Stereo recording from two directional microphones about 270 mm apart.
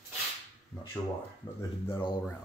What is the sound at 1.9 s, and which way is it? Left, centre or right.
Speech, centre.